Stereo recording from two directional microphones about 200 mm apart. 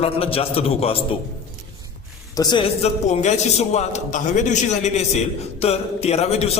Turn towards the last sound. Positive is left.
turn(degrees=30)  # may be behind; listen again after turning